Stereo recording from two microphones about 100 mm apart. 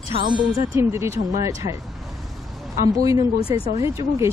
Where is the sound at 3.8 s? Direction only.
30° right (ahead or behind).